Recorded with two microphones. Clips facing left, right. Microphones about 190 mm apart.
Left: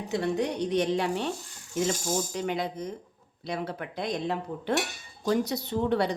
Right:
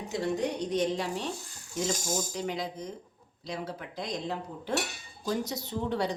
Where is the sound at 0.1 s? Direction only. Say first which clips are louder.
Left 2 dB; 65° left (ahead or behind).